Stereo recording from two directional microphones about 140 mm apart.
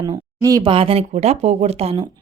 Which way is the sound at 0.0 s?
25° right (ahead or behind).